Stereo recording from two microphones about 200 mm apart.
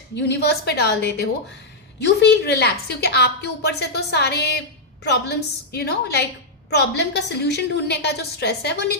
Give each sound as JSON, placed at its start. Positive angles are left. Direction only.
{"t": 0.2, "sound": "a woman's voice", "side_deg": 55}